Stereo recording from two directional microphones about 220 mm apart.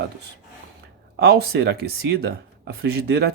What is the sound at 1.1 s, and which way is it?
Speech, 45° right (ahead or behind).